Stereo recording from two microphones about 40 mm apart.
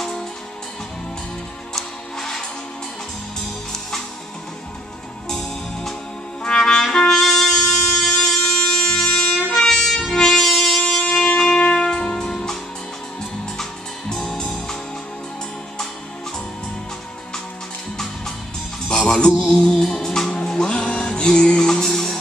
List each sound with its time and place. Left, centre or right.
1.8 s music: centre
6.6 s music: centre
13.6 s music: centre
18.9 s music: centre
21.8 s music: centre